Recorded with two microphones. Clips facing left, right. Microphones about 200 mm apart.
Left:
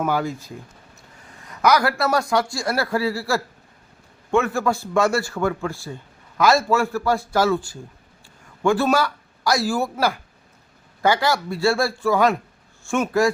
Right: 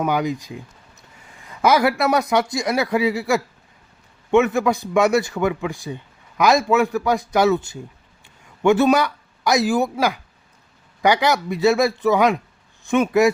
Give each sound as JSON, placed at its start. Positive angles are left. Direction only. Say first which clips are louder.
{"t": 0.0, "sound": "a man's voice", "louder": "right 2 dB", "side_deg": -15}